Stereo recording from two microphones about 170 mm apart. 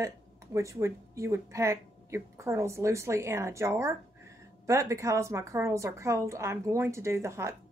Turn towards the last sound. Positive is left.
turn(degrees=-15)  # may be behind; listen again after turning